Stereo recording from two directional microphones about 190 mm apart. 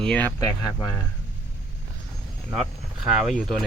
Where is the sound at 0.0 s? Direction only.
5° left (ahead or behind).